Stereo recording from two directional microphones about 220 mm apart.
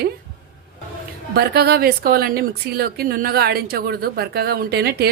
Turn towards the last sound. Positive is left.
turn(degrees=-45)  # may be behind; listen again after turning